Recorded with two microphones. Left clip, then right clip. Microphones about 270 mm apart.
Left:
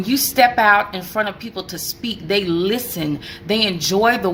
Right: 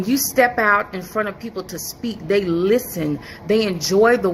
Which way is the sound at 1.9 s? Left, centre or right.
Centre.